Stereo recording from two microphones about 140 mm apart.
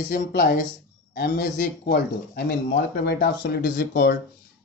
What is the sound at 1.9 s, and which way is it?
Speech, 90° left.